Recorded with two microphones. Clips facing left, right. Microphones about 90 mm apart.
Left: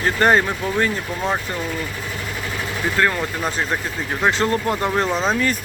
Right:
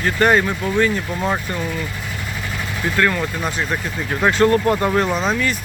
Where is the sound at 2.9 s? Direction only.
25° left (ahead or behind).